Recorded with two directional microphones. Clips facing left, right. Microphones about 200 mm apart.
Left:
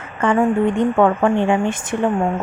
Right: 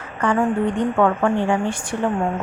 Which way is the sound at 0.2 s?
20° left (ahead or behind).